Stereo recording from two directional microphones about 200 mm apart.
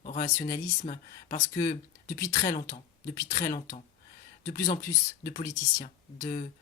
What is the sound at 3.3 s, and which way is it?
Speech, 40° left (ahead or behind).